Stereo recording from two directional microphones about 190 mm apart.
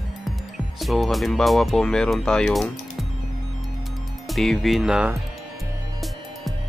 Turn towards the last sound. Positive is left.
turn(degrees=-5)  # may be behind; listen again after turning